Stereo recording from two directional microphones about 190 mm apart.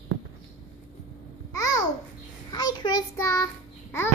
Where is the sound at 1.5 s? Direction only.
20° left (ahead or behind).